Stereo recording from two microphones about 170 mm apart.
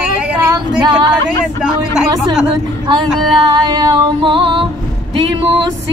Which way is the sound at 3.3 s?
25° right (ahead or behind).